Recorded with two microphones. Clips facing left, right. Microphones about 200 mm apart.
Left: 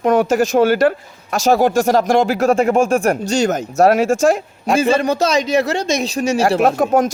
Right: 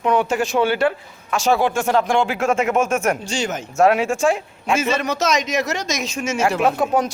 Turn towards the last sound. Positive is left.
turn(degrees=45)  # may be behind; listen again after turning